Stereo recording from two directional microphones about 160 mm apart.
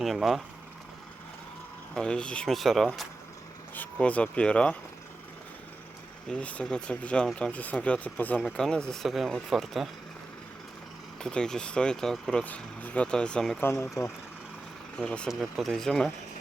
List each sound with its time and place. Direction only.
0.0 s speech: centre (ahead or behind)
2.0 s speech: 5° left (ahead or behind)
6.2 s speech: 5° left (ahead or behind)
11.2 s speech: 5° left (ahead or behind)
14.0 s speech: 20° left (ahead or behind)
14.9 s speech: 5° left (ahead or behind)